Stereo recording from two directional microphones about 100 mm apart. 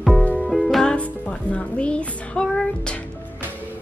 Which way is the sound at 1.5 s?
10° left (ahead or behind).